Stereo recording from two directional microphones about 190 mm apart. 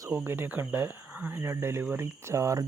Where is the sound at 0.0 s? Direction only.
10° right (ahead or behind).